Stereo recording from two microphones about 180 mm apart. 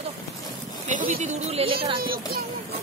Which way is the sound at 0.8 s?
45° right (ahead or behind).